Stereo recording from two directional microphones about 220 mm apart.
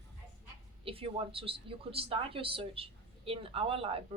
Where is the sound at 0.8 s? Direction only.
25° right (ahead or behind).